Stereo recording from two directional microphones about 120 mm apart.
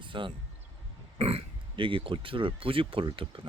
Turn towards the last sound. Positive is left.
turn(degrees=-45)  # may be behind; listen again after turning